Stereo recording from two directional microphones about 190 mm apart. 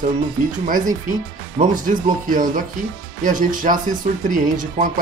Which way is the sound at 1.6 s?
40° right (ahead or behind).